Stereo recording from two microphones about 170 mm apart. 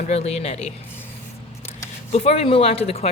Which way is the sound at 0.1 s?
40° left (ahead or behind).